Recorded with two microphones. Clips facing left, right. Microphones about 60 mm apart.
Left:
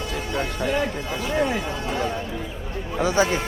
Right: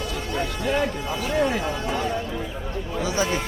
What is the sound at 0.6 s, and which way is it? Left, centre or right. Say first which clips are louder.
Speech: right 1 dB; centre.